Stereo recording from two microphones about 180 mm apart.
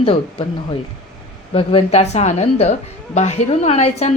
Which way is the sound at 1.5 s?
30° left (ahead or behind).